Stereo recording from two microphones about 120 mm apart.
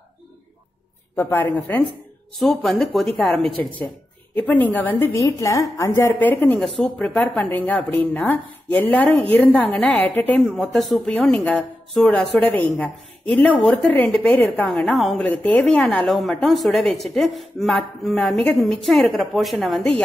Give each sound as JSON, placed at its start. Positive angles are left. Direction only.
{"t": 1.1, "sound": "speech", "side_deg": 15}